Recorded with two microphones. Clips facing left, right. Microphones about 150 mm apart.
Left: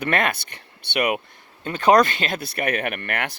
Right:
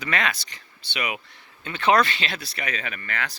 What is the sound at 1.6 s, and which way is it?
Speech, 45° left (ahead or behind).